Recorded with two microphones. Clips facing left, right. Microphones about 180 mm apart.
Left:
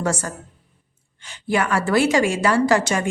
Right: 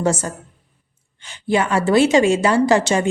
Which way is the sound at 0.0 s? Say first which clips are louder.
Right 4 dB; 25° right (ahead or behind).